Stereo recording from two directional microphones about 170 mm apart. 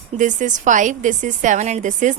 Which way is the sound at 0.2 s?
45° right (ahead or behind).